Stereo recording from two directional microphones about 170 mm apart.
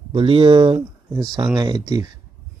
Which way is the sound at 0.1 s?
30° right (ahead or behind).